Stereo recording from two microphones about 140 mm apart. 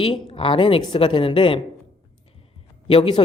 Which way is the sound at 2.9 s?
40° left (ahead or behind).